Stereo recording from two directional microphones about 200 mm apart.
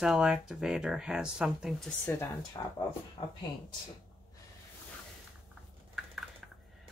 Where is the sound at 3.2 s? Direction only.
25° left (ahead or behind).